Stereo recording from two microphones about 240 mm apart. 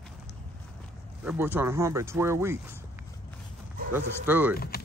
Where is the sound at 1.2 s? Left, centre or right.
Centre.